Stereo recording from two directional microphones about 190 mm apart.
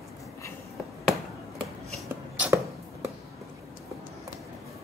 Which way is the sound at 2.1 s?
10° right (ahead or behind).